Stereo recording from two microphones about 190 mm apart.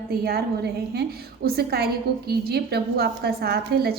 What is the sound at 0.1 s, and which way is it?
A woman's voice, 55° right (ahead or behind).